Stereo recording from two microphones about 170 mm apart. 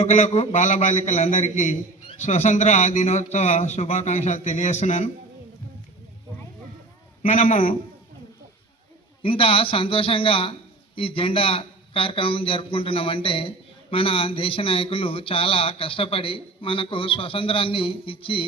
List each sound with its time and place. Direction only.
0.0 s a man's voice: 40° left (ahead or behind)
7.2 s a man's voice: 50° left (ahead or behind)
9.2 s a man's voice: 30° left (ahead or behind)